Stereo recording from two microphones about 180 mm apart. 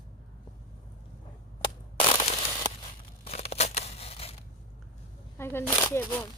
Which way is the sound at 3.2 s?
35° left (ahead or behind).